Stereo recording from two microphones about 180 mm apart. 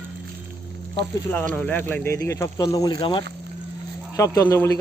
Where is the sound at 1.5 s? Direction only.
10° left (ahead or behind).